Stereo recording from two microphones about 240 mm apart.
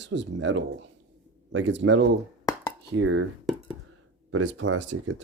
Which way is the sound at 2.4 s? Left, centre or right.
Centre.